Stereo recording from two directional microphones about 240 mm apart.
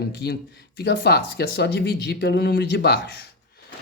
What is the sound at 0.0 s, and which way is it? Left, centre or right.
Speech, left.